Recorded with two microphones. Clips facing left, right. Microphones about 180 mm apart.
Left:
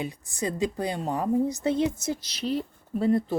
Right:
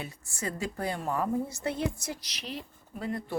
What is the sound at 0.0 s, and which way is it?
A woman's voice, 15° left (ahead or behind).